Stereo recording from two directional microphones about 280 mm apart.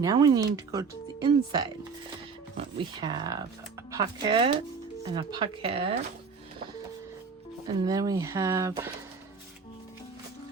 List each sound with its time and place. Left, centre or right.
0.0 s speech: centre
2.7 s speech: centre
7.8 s speech: centre